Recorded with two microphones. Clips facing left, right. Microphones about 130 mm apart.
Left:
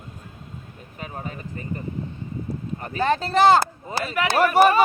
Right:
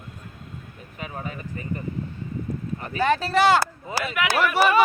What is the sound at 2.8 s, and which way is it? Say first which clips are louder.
Speech: even; 35° left (ahead or behind).